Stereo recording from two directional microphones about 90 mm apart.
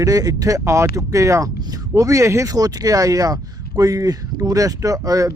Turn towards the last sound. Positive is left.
turn(degrees=-40)  # may be behind; listen again after turning